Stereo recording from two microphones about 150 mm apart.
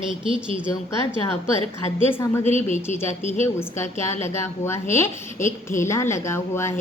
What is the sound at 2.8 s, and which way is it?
A woman's voice, 15° left (ahead or behind).